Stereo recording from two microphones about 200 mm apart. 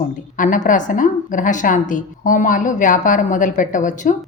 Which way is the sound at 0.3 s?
40° left (ahead or behind).